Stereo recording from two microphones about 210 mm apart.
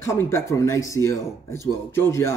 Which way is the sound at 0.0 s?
15° left (ahead or behind).